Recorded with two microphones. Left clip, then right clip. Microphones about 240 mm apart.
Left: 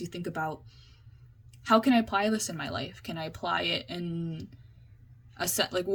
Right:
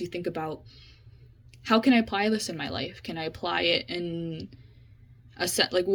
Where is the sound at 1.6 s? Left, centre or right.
Centre.